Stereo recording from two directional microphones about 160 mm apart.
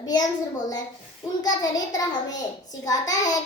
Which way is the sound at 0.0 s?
25° left (ahead or behind).